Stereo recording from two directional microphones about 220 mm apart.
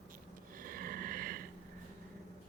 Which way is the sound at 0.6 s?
40° right (ahead or behind).